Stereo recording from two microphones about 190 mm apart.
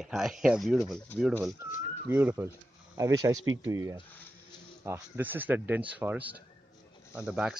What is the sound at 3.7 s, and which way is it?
Speech, 15° right (ahead or behind).